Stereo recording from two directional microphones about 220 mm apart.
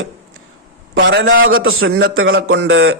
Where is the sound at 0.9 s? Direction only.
45° right (ahead or behind).